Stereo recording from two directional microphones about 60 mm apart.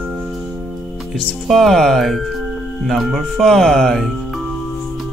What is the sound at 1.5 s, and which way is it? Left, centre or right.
Speech, centre.